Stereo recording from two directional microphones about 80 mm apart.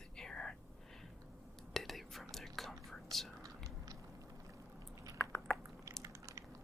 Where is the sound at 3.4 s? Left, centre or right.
Right.